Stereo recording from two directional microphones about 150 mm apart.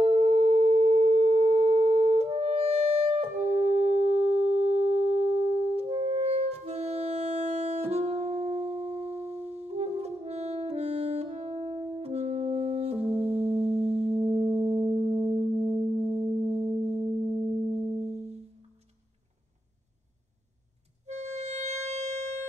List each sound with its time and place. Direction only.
0.0 s sine wave: 45° right (ahead or behind)
8.9 s music: 15° left (ahead or behind)
9.3 s saxophone: 45° right (ahead or behind)
15.2 s music: 45° right (ahead or behind)
16.1 s music: 10° right (ahead or behind)
18.1 s music: 45° right (ahead or behind)
21.1 s music: 50° right (ahead or behind)